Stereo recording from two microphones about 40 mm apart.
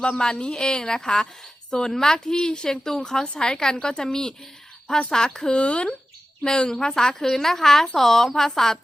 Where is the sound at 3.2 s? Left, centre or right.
Left.